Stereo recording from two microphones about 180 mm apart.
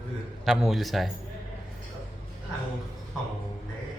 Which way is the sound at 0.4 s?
Centre (ahead or behind).